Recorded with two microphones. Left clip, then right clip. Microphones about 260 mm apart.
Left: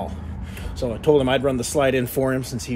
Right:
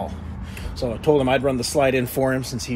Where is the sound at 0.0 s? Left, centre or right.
Centre.